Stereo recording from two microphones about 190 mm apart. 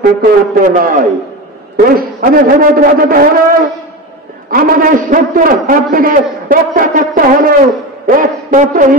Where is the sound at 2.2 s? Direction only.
50° right (ahead or behind).